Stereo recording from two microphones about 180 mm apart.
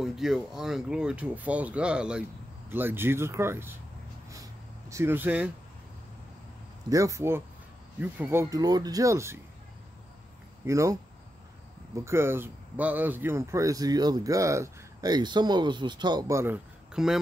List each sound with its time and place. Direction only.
0.0 s speech: centre (ahead or behind)
4.3 s a sound: 15° right (ahead or behind)
6.9 s speech: 15° right (ahead or behind)
10.6 s speech: 15° right (ahead or behind)
12.0 s speech: 15° right (ahead or behind)
16.9 s speech: centre (ahead or behind)